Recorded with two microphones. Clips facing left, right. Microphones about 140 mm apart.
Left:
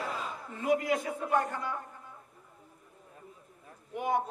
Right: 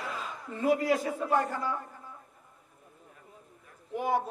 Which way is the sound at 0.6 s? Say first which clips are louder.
Right 2 dB; 30° right (ahead or behind).